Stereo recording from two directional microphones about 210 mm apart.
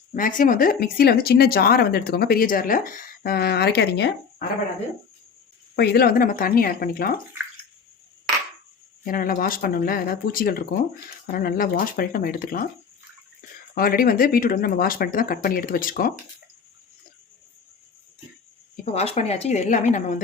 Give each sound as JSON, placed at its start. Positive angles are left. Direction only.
{"t": 0.1, "sound": "speech", "side_deg": 40}
{"t": 5.7, "sound": "speech", "side_deg": 50}
{"t": 9.0, "sound": "speech", "side_deg": 40}
{"t": 13.7, "sound": "speech", "side_deg": 45}
{"t": 18.9, "sound": "a woman's voice", "side_deg": 30}